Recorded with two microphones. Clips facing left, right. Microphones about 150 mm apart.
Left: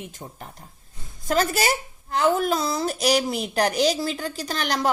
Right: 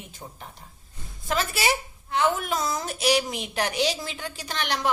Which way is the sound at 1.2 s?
40° left (ahead or behind).